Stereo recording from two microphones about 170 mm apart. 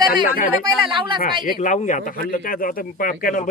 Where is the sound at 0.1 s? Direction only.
60° left (ahead or behind).